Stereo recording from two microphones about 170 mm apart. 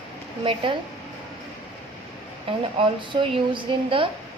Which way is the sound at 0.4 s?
30° right (ahead or behind).